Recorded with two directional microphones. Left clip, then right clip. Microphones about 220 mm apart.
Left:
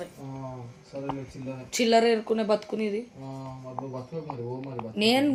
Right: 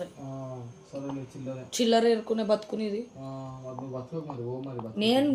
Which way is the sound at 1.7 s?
30° left (ahead or behind).